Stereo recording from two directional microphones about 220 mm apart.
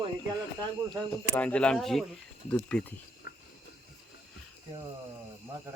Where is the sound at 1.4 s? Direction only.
5° left (ahead or behind).